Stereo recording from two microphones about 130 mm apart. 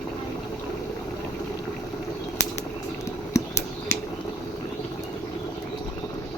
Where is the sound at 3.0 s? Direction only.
25° left (ahead or behind).